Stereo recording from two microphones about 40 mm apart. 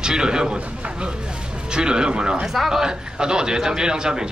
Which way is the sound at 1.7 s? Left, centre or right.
Right.